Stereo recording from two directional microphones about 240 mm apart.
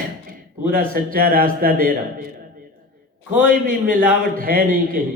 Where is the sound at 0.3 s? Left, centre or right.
Right.